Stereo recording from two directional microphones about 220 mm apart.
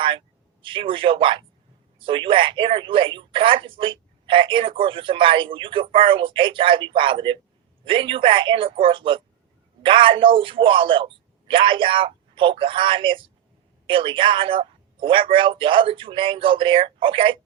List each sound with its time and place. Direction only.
0.6 s speech: 25° right (ahead or behind)